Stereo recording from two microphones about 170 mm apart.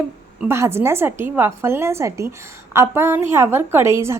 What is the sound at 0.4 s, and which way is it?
A woman's voice, 15° right (ahead or behind).